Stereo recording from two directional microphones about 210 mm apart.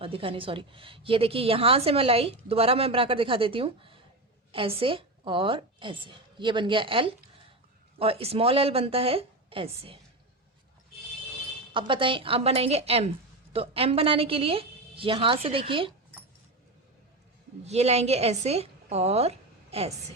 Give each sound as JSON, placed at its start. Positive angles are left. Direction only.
{"t": 0.0, "sound": "a woman's voice", "side_deg": -25}
{"t": 11.7, "sound": "a woman's voice", "side_deg": -25}
{"t": 17.7, "sound": "a woman's voice", "side_deg": -30}